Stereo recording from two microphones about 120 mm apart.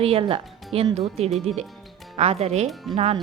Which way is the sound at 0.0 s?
50° right (ahead or behind).